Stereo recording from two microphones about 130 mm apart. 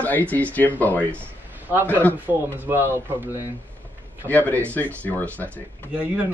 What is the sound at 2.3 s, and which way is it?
A man's voice, 15° right (ahead or behind).